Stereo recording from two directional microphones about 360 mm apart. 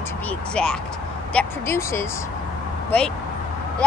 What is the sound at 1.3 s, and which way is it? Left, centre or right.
Speech, centre.